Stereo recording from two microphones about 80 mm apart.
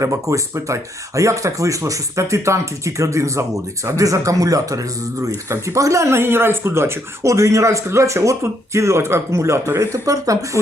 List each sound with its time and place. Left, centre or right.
0.0 s speech: right